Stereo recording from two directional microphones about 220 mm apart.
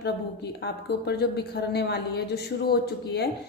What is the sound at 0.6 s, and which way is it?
Speech, 50° left (ahead or behind).